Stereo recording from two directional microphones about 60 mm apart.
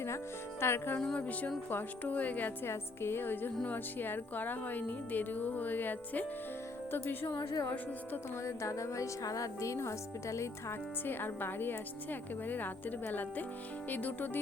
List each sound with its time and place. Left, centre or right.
0.6 s speech: left
1.0 s speech: centre
2.6 s speech: left
7.3 s a woman's voice: left
11.0 s speech: left